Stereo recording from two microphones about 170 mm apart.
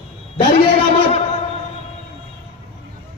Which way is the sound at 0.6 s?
35° left (ahead or behind).